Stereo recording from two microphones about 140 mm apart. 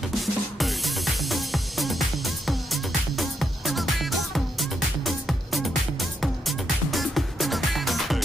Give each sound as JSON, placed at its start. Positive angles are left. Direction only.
{"t": 0.1, "sound": "music", "side_deg": 0}